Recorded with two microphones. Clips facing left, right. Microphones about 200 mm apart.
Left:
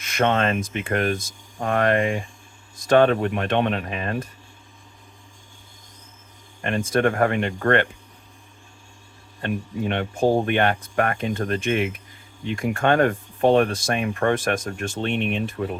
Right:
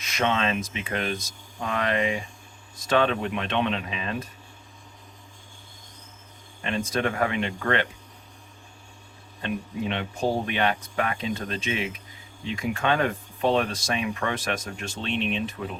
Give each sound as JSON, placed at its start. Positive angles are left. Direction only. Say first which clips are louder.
{"t": 0.0, "sound": "speech", "louder": "left 4 dB", "side_deg": 55}
{"t": 6.6, "sound": "speech", "louder": "left 5 dB", "side_deg": 50}
{"t": 9.4, "sound": "speech", "louder": "left 3 dB", "side_deg": 50}